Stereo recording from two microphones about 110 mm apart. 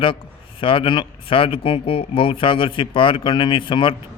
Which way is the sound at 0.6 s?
55° left (ahead or behind).